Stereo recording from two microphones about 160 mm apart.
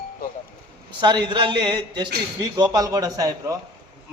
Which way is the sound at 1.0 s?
30° right (ahead or behind).